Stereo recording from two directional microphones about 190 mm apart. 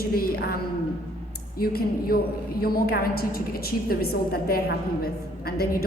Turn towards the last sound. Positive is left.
turn(degrees=55)  # may be behind; listen again after turning